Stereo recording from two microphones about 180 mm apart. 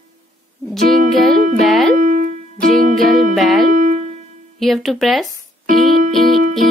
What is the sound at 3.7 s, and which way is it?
Music, 45° right (ahead or behind).